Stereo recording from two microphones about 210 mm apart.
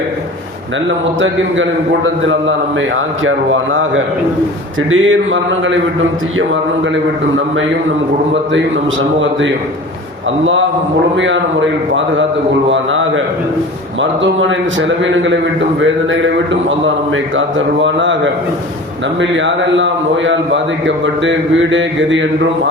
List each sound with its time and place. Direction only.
3.2 s a man's voice: 70° right (ahead or behind)
12.7 s a man's voice: 65° right (ahead or behind)
19.2 s a man's voice: 60° right (ahead or behind)